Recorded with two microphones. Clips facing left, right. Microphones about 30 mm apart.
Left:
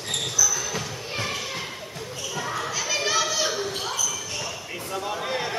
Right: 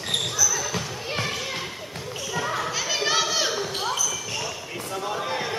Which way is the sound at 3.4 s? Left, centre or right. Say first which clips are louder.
Right 1 dB; centre.